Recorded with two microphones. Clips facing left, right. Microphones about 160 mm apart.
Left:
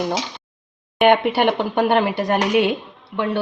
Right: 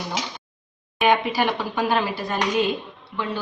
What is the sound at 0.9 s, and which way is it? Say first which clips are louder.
A woman's voice: left 5 dB; 65° left (ahead or behind).